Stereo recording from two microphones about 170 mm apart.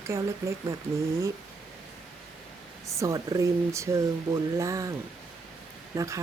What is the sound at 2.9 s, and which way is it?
Speech, 20° right (ahead or behind).